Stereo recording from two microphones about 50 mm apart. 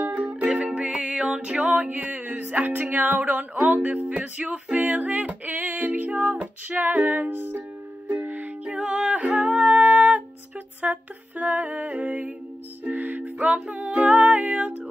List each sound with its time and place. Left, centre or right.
0.2 s music: right
0.5 s music: centre
1.9 s music: right
8.1 s music: right
8.6 s music: centre